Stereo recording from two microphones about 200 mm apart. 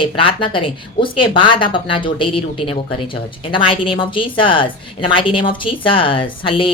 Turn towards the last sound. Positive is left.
turn(degrees=25)  # may be behind; listen again after turning